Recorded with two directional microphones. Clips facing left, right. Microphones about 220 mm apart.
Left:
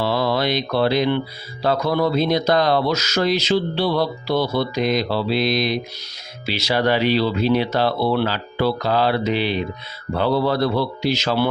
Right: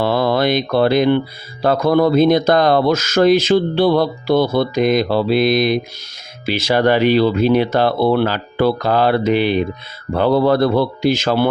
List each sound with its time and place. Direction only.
0.0 s speech: 50° right (ahead or behind)